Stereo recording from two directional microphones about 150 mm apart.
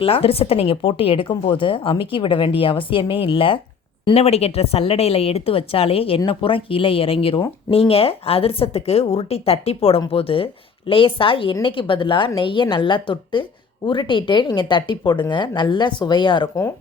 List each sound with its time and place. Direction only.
0.0 s a woman's voice: 40° left (ahead or behind)